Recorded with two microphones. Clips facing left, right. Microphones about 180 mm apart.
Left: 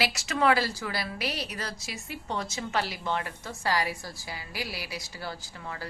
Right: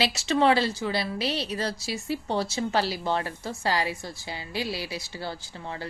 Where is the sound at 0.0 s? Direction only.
25° right (ahead or behind).